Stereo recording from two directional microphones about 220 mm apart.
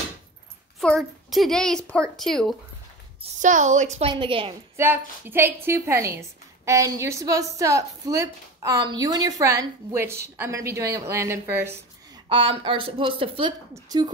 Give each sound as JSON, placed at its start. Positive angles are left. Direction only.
{"t": 0.7, "sound": "a woman's voice", "side_deg": 0}
{"t": 3.2, "sound": "a woman's voice", "side_deg": -35}
{"t": 4.7, "sound": "a woman's voice", "side_deg": -10}
{"t": 12.3, "sound": "a woman's voice", "side_deg": -20}